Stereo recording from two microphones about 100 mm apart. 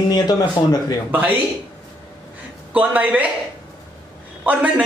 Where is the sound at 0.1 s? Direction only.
45° left (ahead or behind).